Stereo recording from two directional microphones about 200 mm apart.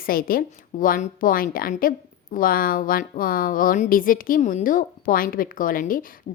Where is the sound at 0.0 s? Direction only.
45° left (ahead or behind).